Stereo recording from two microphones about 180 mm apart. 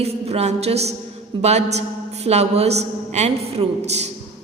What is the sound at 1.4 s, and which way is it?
A woman's voice, 35° right (ahead or behind).